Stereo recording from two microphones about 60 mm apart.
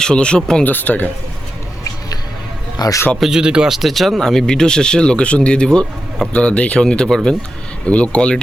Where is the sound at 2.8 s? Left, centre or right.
Left.